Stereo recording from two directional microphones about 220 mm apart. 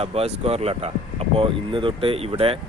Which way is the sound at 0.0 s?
25° right (ahead or behind).